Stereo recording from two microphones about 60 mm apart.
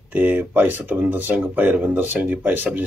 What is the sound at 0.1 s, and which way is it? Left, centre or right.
Speech, right.